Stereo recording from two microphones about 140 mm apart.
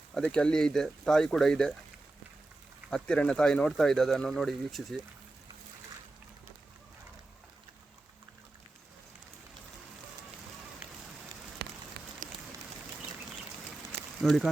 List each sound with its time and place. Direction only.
0.1 s speech: 10° left (ahead or behind)
2.9 s speech: 5° left (ahead or behind)
12.2 s a sound: 70° right (ahead or behind)
14.2 s speech: centre (ahead or behind)